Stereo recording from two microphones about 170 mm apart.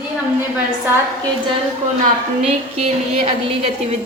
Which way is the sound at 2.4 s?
40° right (ahead or behind).